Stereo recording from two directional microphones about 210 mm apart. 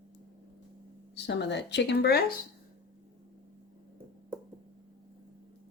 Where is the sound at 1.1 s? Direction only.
55° left (ahead or behind).